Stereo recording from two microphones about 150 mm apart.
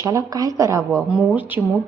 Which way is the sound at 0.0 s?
20° right (ahead or behind).